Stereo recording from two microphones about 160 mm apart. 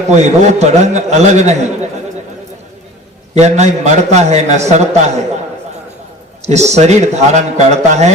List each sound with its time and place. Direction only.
0.1 s a man's voice: 45° right (ahead or behind)
3.3 s a man's voice: 45° right (ahead or behind)
6.4 s a man's voice: 45° right (ahead or behind)